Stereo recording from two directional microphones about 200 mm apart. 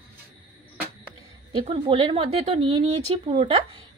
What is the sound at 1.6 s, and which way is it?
Speech, 25° right (ahead or behind).